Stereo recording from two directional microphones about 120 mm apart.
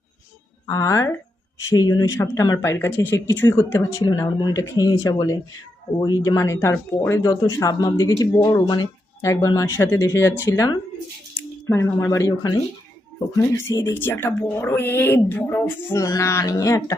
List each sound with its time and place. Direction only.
0.7 s speech: 25° left (ahead or behind)
4.0 s speech: 30° left (ahead or behind)